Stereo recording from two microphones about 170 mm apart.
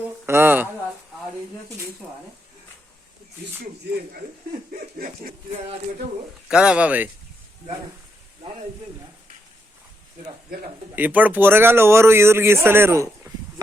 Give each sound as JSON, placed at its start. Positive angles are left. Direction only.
{"t": 0.3, "sound": "speech", "side_deg": -15}
{"t": 4.7, "sound": "a sound", "side_deg": -60}
{"t": 6.5, "sound": "speech", "side_deg": -5}
{"t": 10.9, "sound": "speech", "side_deg": -10}